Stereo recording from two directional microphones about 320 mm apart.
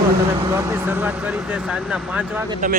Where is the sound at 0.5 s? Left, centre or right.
Centre.